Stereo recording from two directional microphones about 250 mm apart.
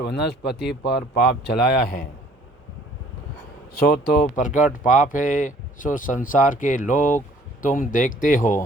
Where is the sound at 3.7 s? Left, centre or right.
Left.